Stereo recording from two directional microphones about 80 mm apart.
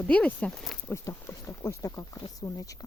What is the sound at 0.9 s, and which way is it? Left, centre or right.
Speech, left.